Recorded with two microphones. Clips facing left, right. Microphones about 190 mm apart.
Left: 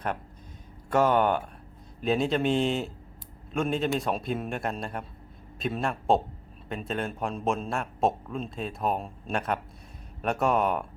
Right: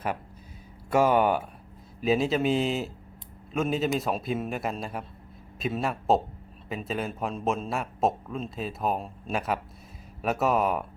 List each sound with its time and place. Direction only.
0.9 s a man's voice: 10° right (ahead or behind)